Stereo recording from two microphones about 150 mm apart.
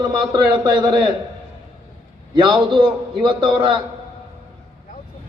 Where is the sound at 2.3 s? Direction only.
30° right (ahead or behind).